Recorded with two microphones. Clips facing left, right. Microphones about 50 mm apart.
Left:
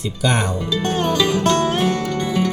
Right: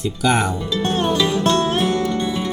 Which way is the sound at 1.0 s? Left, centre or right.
Left.